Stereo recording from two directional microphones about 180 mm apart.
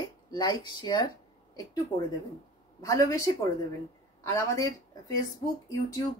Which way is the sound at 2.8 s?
20° left (ahead or behind).